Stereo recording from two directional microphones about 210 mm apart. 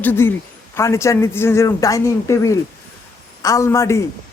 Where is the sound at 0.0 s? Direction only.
10° left (ahead or behind).